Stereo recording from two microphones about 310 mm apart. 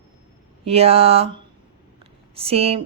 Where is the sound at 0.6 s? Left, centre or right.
Centre.